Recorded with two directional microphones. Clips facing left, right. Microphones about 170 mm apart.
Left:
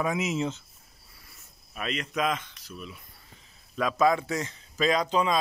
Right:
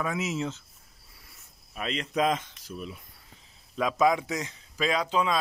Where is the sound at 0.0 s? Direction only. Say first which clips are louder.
Left 2 dB; 15° left (ahead or behind).